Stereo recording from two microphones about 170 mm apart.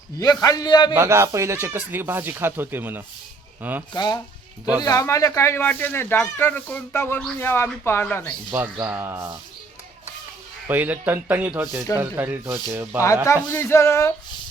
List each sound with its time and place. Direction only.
0.2 s a man's voice: 20° left (ahead or behind)
0.9 s speech: 15° right (ahead or behind)
3.9 s a man's voice: 25° left (ahead or behind)
8.5 s speech: 10° right (ahead or behind)
10.7 s speech: 10° right (ahead or behind)
13.2 s speech: 15° left (ahead or behind)